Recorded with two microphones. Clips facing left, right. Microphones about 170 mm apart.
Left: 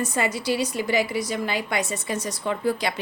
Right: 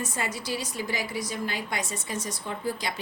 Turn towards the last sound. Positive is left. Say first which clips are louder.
# left 7 dB
turn(degrees=65)  # may be behind; listen again after turning